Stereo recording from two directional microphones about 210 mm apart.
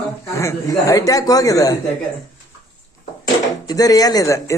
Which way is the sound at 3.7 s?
15° left (ahead or behind).